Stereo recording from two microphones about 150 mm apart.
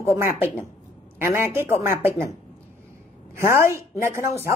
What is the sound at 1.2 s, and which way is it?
Speech, 15° right (ahead or behind).